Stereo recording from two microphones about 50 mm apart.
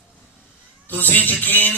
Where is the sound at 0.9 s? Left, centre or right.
Left.